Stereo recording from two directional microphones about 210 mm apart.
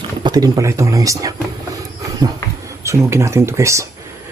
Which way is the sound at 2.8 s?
15° right (ahead or behind).